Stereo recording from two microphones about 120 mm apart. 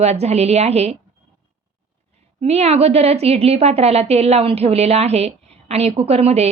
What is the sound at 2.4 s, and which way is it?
A woman's voice, 60° right (ahead or behind).